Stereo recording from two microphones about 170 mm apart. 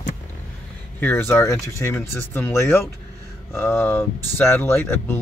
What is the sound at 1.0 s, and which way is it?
Speech, 10° left (ahead or behind).